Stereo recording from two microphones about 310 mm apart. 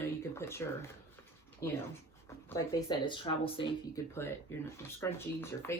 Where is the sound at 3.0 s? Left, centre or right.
Centre.